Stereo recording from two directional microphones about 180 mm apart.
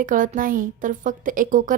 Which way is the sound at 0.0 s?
50° right (ahead or behind).